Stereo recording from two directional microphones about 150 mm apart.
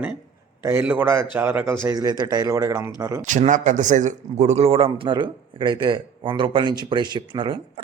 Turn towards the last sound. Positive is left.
turn(degrees=-30)  # may be behind; listen again after turning